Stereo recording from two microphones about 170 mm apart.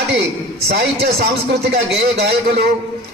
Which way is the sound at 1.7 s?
75° right (ahead or behind).